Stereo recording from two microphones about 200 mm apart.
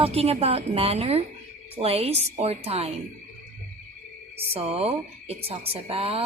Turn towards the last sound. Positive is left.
turn(degrees=-30)  # may be behind; listen again after turning